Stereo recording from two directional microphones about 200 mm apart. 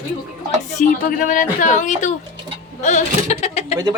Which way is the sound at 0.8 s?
40° left (ahead or behind).